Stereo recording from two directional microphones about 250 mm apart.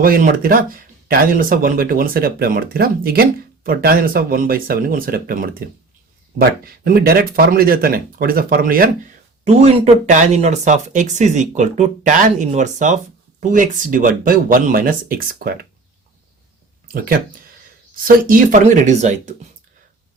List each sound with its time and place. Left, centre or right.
0.0 s speech: right
6.8 s speech: right
17.9 s speech: right